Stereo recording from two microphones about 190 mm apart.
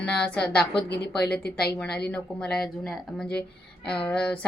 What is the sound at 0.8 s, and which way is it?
Speech, 60° left (ahead or behind).